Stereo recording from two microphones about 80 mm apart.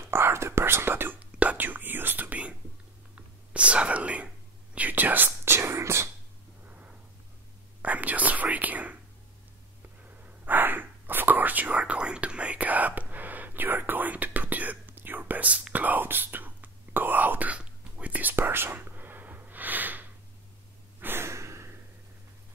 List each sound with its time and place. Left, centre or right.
0.0 s whispering: right
6.6 s a sound: right
7.8 s whispering: centre
10.0 s whispering: right
21.0 s breathing: right